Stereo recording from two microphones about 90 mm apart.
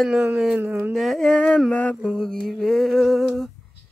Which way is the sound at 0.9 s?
Centre (ahead or behind).